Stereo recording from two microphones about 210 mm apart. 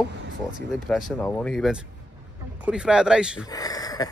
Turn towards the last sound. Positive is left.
turn(degrees=15)  # may be behind; listen again after turning